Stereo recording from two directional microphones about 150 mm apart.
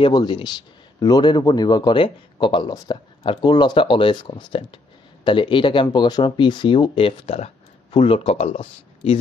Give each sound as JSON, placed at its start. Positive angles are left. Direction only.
{"t": 0.0, "sound": "speech", "side_deg": 30}